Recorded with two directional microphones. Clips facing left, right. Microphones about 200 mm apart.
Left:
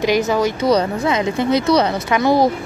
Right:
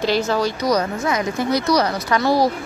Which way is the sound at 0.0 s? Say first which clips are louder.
Left 3 dB; 15° left (ahead or behind).